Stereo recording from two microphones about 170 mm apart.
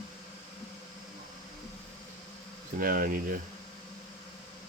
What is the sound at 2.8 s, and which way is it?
Insect, 55° right (ahead or behind).